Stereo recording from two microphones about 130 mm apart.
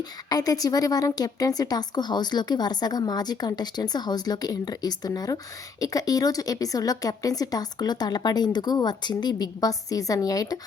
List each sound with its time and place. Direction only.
0.3 s a woman's voice: 30° left (ahead or behind)